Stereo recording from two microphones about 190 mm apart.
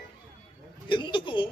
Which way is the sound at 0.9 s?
25° left (ahead or behind).